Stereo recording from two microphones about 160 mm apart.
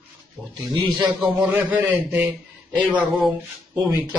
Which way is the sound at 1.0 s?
10° right (ahead or behind).